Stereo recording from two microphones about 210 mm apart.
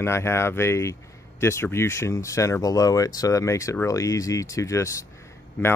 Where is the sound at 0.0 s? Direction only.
10° left (ahead or behind).